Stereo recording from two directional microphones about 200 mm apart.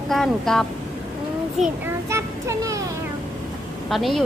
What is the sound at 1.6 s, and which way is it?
Speech, 30° right (ahead or behind).